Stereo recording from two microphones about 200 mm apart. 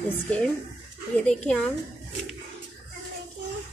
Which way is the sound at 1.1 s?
5° left (ahead or behind).